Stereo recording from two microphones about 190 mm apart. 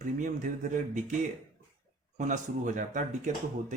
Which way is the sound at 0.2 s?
40° right (ahead or behind).